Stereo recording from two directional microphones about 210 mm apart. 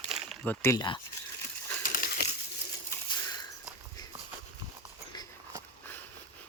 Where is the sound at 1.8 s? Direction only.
40° left (ahead or behind).